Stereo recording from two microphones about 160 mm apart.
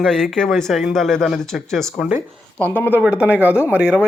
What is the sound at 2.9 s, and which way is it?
Speech, 10° right (ahead or behind).